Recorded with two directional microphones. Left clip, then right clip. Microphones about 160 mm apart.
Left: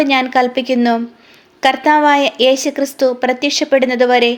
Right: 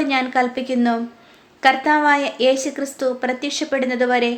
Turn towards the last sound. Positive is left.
turn(degrees=40)  # may be behind; listen again after turning